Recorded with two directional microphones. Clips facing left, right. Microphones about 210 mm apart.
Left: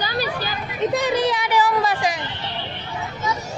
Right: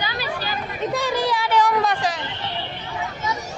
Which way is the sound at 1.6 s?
Centre (ahead or behind).